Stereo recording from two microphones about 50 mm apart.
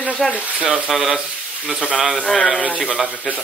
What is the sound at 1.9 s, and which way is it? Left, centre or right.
Speech, centre.